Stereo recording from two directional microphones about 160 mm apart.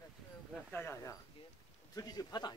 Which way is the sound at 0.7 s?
15° left (ahead or behind).